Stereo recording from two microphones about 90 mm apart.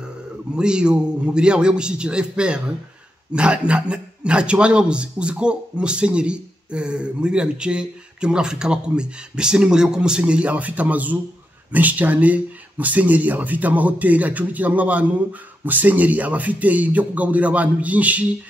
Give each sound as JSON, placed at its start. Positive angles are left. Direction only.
{"t": 0.6, "sound": "a man's voice", "side_deg": -10}